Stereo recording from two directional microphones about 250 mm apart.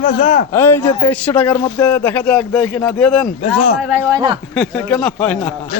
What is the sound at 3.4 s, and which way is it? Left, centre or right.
Speech, left.